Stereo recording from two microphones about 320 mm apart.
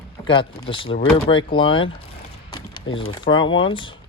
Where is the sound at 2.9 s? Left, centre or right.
Centre.